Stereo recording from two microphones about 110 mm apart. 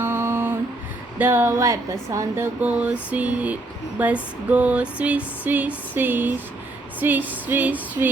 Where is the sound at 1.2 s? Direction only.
20° right (ahead or behind).